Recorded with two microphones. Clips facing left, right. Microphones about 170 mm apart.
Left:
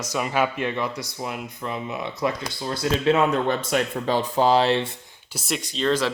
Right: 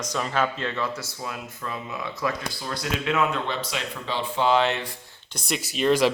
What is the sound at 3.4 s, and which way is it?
Speech, 50° left (ahead or behind).